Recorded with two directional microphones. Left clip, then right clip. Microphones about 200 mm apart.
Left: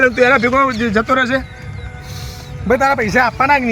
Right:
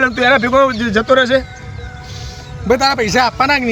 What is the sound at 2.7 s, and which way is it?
Speech, 60° right (ahead or behind).